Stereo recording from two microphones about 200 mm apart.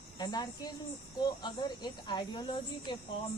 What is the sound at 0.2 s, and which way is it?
Speech, 20° left (ahead or behind).